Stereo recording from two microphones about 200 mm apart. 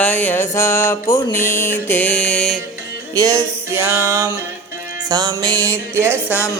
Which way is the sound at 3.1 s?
15° right (ahead or behind).